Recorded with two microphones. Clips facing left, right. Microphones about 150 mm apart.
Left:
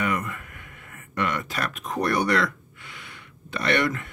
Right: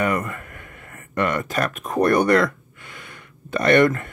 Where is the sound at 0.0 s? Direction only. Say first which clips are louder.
Right 4 dB; 50° right (ahead or behind).